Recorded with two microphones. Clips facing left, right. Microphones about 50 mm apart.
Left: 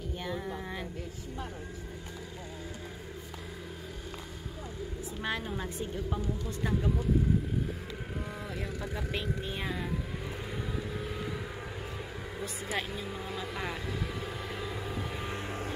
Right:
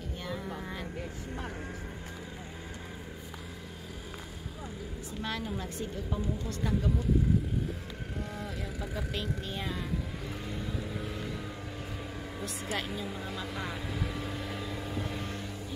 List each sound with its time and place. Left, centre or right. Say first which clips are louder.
0.2 s a sound: left 1 dB; centre
5.2 s a woman's voice: left 1 dB; centre
8.4 s vehicle: left 1 dB; centre
8.9 s vehicle: even; centre
15.2 s vehicle: left 2 dB; left